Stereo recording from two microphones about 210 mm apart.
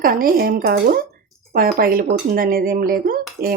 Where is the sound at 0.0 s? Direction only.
45° right (ahead or behind).